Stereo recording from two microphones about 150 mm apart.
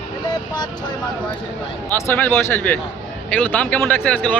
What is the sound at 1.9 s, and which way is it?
Speech, 15° left (ahead or behind).